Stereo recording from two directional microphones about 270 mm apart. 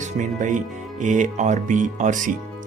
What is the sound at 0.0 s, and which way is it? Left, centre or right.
Speech, right.